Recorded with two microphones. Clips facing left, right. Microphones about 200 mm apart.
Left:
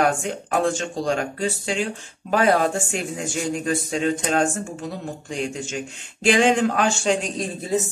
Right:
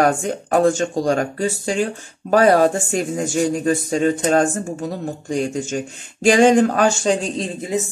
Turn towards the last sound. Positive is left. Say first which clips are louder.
# right 1 dB
turn(degrees=-15)  # may be behind; listen again after turning